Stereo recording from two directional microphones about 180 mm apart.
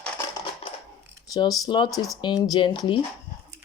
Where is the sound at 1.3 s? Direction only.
25° left (ahead or behind).